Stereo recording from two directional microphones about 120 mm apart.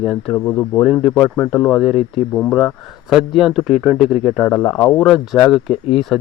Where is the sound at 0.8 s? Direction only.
5° left (ahead or behind).